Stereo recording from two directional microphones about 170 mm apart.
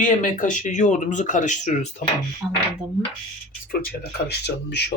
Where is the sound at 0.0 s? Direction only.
50° left (ahead or behind).